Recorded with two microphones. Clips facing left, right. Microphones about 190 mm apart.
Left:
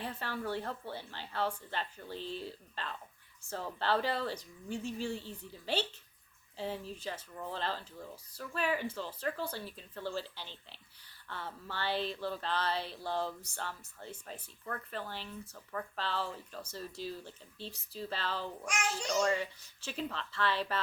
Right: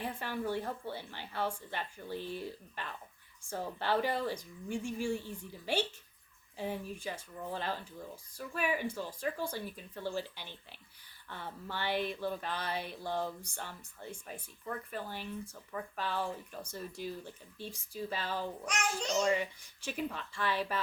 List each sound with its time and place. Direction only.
0.0 s speech: 15° right (ahead or behind)